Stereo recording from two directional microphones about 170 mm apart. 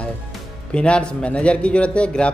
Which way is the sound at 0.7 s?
5° left (ahead or behind).